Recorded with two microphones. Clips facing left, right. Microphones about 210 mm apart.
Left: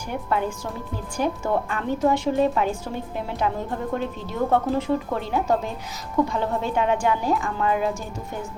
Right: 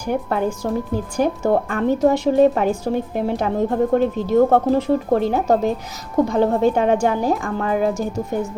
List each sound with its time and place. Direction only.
0.1 s a woman's voice: 40° right (ahead or behind)